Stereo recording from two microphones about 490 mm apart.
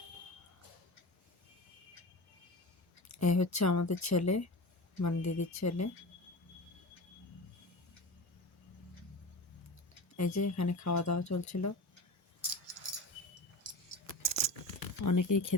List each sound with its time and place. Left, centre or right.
3.1 s speech: left
10.2 s speech: left
12.8 s a sound: left
13.6 s keys jangling: centre
14.8 s speech: left